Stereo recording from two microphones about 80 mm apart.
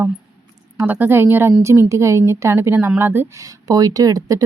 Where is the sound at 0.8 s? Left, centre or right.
Right.